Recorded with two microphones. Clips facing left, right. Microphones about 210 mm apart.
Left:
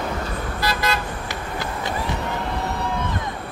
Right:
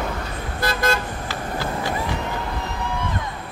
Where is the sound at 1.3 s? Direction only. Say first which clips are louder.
Right 2 dB; 20° left (ahead or behind).